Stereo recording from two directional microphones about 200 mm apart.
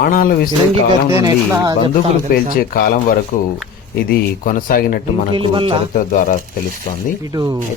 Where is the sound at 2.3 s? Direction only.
45° left (ahead or behind).